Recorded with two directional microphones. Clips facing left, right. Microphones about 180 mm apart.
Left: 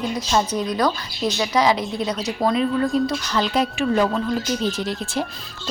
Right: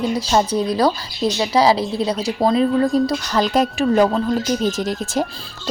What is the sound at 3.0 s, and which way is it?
A woman's voice, 40° right (ahead or behind).